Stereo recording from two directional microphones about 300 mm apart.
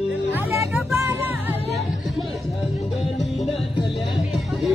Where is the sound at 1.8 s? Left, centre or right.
Centre.